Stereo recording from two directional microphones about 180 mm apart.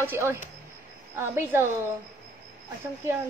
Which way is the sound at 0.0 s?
10° right (ahead or behind).